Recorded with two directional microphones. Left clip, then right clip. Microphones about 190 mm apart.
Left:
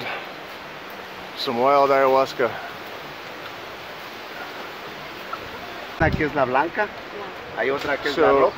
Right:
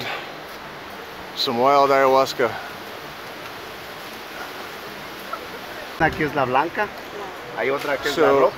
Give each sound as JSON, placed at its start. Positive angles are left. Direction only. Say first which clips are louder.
{"t": 1.4, "sound": "speech", "louder": "right 1 dB", "side_deg": 0}
{"t": 5.9, "sound": "speech", "louder": "even", "side_deg": 0}
{"t": 7.5, "sound": "speech", "louder": "even", "side_deg": 20}
{"t": 8.0, "sound": "speech", "louder": "even", "side_deg": 5}